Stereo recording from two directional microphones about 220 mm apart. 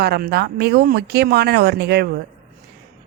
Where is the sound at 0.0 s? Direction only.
45° right (ahead or behind).